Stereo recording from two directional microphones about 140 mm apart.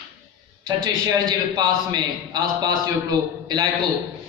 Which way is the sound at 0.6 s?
30° right (ahead or behind).